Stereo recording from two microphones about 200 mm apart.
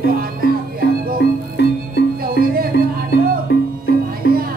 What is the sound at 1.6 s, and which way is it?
Music, 60° left (ahead or behind).